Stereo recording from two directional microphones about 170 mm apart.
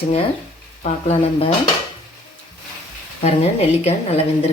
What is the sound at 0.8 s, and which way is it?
Speech, 35° left (ahead or behind).